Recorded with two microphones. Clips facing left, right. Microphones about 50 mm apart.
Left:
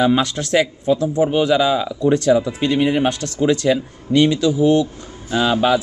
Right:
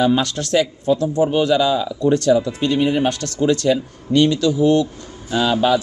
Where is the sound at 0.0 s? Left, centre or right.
Centre.